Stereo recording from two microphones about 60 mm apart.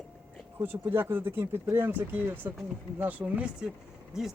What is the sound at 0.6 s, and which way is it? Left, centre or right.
Speech, right.